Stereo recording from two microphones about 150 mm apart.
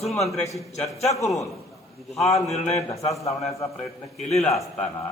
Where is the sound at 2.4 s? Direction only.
45° left (ahead or behind).